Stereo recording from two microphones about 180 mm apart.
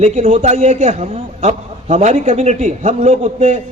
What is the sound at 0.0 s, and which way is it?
A man's voice, 40° right (ahead or behind).